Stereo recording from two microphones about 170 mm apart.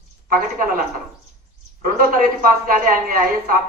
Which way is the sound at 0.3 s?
55° right (ahead or behind).